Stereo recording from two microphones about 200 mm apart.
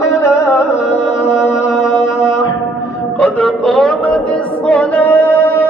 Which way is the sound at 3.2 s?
5° left (ahead or behind).